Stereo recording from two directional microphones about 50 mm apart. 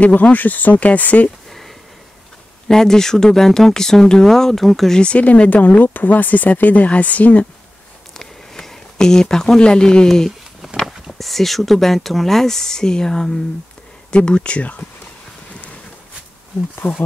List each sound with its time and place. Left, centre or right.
0.0 s speech: left
2.7 s speech: centre
4.9 s speech: centre
5.2 s speech: left
8.1 s a sound: centre
10.0 s speech: centre
10.6 s a sound: centre
11.1 s speech: centre; by 14.9 s left
16.8 s speech: left